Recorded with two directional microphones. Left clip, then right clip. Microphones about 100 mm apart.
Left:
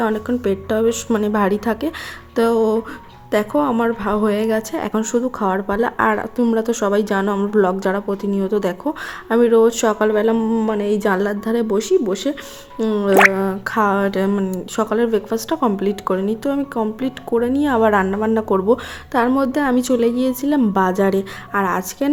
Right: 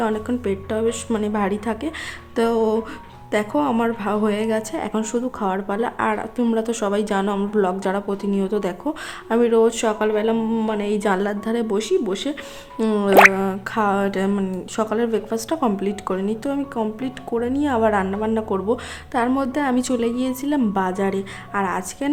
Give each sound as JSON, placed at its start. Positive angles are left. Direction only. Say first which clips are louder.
{"t": 0.0, "sound": "a woman's voice", "louder": "left 3 dB", "side_deg": 30}
{"t": 0.5, "sound": "a woman's voice", "louder": "left 5 dB", "side_deg": 40}
{"t": 2.3, "sound": "a woman's voice", "louder": "left 3 dB", "side_deg": 25}
{"t": 12.8, "sound": "music", "louder": "left 2 dB", "side_deg": 0}
{"t": 13.3, "sound": "a woman's voice", "louder": "left 3 dB", "side_deg": 20}
{"t": 21.5, "sound": "a woman's voice", "louder": "left 4 dB", "side_deg": 35}